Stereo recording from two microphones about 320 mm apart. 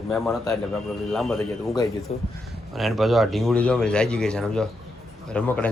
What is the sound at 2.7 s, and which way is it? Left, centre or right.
A man's voice, centre.